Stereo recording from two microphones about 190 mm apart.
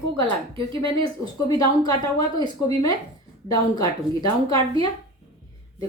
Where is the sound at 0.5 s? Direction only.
25° right (ahead or behind).